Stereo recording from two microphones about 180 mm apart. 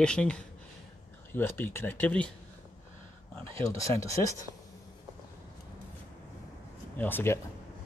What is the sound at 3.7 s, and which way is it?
Speech, 15° left (ahead or behind).